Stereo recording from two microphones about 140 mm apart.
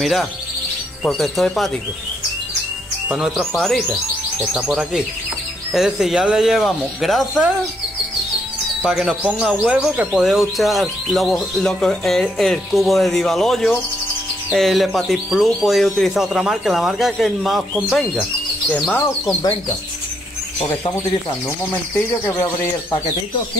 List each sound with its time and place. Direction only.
0.0 s speech: centre (ahead or behind)
3.1 s speech: centre (ahead or behind)
8.8 s speech: 5° right (ahead or behind)
19.0 s speech: 25° left (ahead or behind)